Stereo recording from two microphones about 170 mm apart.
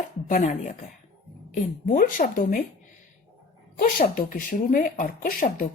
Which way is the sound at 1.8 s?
55° left (ahead or behind).